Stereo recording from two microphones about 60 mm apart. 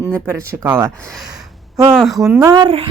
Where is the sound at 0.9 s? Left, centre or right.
Centre.